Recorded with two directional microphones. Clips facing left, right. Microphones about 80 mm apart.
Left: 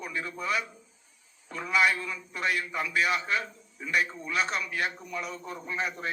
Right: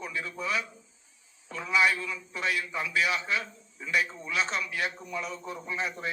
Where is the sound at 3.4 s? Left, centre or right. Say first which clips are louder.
Left 2 dB; centre.